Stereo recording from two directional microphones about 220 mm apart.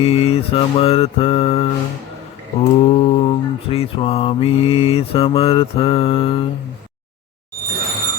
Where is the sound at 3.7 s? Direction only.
25° left (ahead or behind).